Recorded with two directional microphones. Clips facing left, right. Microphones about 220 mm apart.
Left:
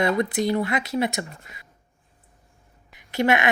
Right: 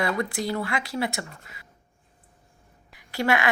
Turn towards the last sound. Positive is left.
turn(degrees=20)  # may be behind; listen again after turning